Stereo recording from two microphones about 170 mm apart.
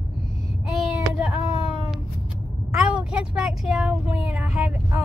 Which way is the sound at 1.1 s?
5° right (ahead or behind).